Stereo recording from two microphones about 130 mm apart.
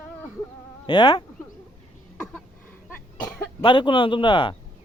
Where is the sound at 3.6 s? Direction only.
40° left (ahead or behind).